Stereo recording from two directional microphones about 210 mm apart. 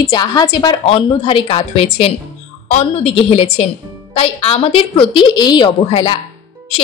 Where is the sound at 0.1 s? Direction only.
20° left (ahead or behind).